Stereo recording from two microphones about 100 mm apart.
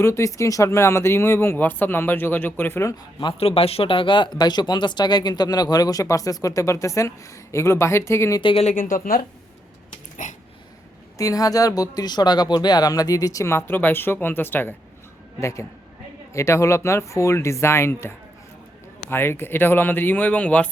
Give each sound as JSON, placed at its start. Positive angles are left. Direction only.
{"t": 0.0, "sound": "speech", "side_deg": 30}
{"t": 3.4, "sound": "speech", "side_deg": 75}
{"t": 8.4, "sound": "speech", "side_deg": 70}
{"t": 11.2, "sound": "speech", "side_deg": 35}
{"t": 15.4, "sound": "speech", "side_deg": 30}
{"t": 19.1, "sound": "speech", "side_deg": 25}